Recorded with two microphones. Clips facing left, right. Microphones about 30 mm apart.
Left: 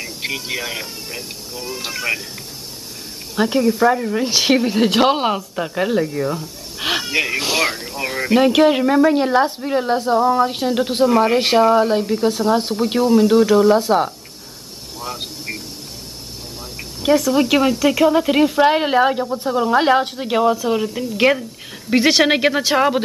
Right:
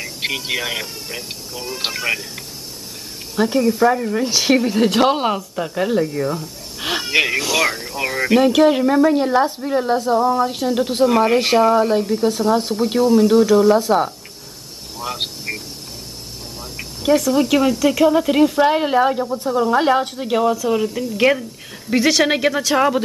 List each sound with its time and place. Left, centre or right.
0.2 s speech: centre
3.3 s speech: centre
3.6 s speech: centre
6.4 s a sound: centre
7.1 s speech: centre
7.3 s speech: centre
7.7 s speech: centre
8.4 s speech: centre
11.1 s speech: centre
11.3 s speech: centre
15.5 s a sound: centre
17.3 s speech: centre
21.9 s speech: left
22.8 s speech: centre